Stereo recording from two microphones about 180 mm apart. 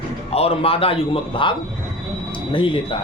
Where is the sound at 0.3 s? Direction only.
35° left (ahead or behind).